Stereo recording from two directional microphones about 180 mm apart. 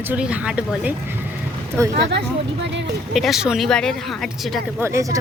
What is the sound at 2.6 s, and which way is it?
Speech, 75° right (ahead or behind).